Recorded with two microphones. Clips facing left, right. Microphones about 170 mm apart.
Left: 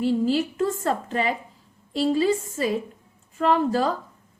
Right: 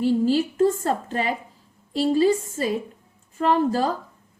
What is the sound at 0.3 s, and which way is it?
A woman's voice, 35° right (ahead or behind).